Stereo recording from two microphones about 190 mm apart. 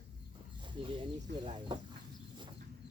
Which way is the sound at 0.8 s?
25° right (ahead or behind).